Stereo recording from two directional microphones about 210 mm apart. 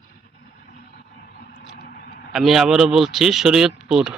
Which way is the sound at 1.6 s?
50° left (ahead or behind).